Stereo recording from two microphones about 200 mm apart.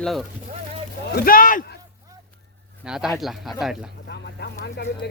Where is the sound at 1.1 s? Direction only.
50° left (ahead or behind).